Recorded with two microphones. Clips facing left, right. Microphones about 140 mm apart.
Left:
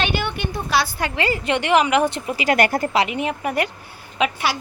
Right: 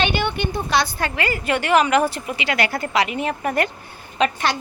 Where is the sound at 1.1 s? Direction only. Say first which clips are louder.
Left 3 dB; 25° left (ahead or behind).